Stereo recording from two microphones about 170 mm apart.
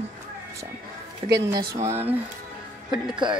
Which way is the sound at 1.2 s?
40° right (ahead or behind).